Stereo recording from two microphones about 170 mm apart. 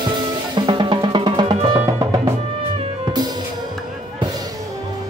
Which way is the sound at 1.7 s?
15° right (ahead or behind).